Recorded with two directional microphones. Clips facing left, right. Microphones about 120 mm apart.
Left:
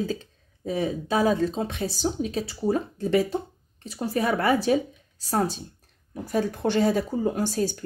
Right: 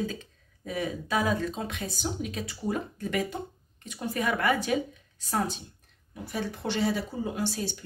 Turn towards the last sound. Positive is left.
turn(degrees=45)  # may be behind; listen again after turning